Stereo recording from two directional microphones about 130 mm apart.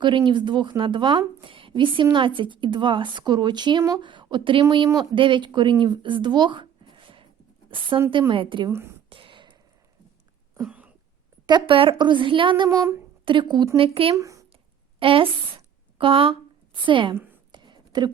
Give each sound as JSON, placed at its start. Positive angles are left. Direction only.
{"t": 0.0, "sound": "a woman's voice", "side_deg": -35}
{"t": 6.9, "sound": "a sound", "side_deg": -40}
{"t": 7.7, "sound": "a woman's voice", "side_deg": -40}
{"t": 8.7, "sound": "speech", "side_deg": -20}
{"t": 9.0, "sound": "whispering", "side_deg": -40}
{"t": 10.6, "sound": "cough", "side_deg": -10}
{"t": 11.4, "sound": "a woman's voice", "side_deg": -40}
{"t": 14.2, "sound": "a sound", "side_deg": -25}
{"t": 14.9, "sound": "a woman's voice", "side_deg": -45}
{"t": 17.5, "sound": "a sound", "side_deg": -35}